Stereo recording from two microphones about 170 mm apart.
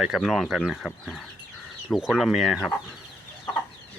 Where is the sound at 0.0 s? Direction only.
5° right (ahead or behind).